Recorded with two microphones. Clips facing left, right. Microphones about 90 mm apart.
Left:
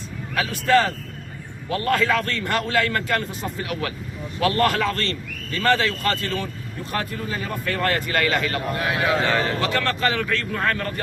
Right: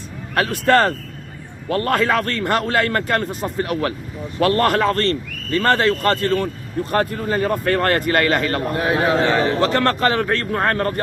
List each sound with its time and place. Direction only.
0.3 s a man's voice: 60° right (ahead or behind); by 9.2 s 35° right (ahead or behind)
9.2 s a man's voice: 20° right (ahead or behind)
9.6 s a man's voice: 40° right (ahead or behind)